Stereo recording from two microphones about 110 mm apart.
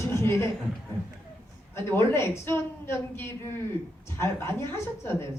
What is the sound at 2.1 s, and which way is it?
A man's voice, 25° left (ahead or behind).